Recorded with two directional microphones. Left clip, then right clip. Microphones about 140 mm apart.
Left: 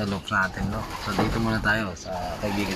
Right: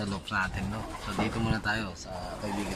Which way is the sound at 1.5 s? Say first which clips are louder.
Left 10 dB; 15° left (ahead or behind).